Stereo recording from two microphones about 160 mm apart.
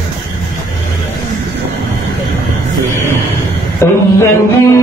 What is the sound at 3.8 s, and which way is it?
Music, 15° left (ahead or behind).